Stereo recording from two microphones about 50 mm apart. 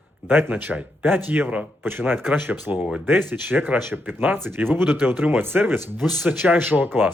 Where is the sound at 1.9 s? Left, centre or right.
Right.